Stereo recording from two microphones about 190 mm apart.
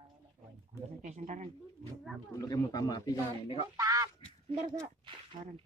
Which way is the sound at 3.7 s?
15° right (ahead or behind).